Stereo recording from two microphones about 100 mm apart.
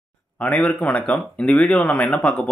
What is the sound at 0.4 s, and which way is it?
Speech, 15° left (ahead or behind).